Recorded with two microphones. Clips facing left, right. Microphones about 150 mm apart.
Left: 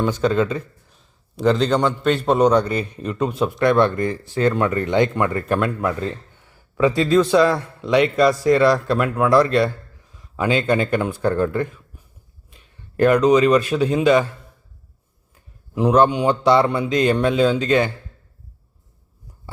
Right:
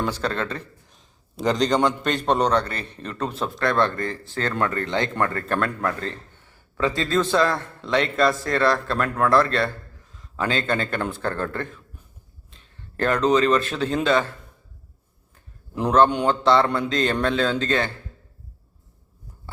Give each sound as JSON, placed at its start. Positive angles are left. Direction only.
{"t": 0.0, "sound": "a man's voice", "side_deg": 5}
{"t": 3.5, "sound": "a man's voice", "side_deg": 20}
{"t": 15.7, "sound": "a man's voice", "side_deg": 10}